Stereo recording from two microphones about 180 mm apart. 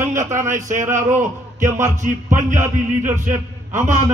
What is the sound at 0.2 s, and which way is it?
Speech, 45° right (ahead or behind).